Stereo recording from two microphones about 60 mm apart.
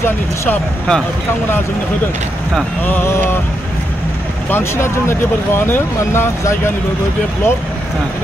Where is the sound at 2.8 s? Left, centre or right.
Left.